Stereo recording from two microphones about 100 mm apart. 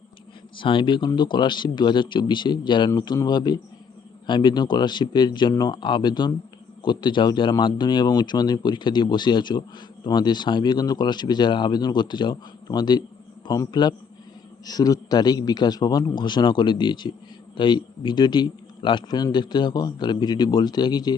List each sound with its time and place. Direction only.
0.5 s speech: 55° left (ahead or behind)